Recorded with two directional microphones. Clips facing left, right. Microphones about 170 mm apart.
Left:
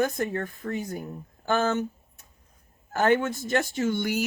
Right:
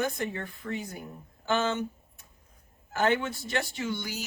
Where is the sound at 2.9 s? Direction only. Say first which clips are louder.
Left 4 dB; 50° left (ahead or behind).